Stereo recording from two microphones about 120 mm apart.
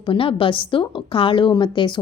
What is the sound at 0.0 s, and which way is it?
Speech, 45° left (ahead or behind).